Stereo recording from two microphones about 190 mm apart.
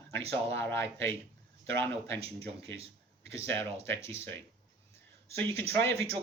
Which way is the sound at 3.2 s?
15° left (ahead or behind).